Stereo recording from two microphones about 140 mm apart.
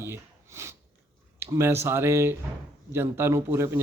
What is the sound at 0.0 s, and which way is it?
Sniff, 20° right (ahead or behind).